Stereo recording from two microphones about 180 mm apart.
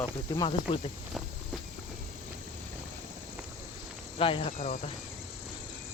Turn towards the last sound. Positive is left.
turn(degrees=30)  # may be behind; listen again after turning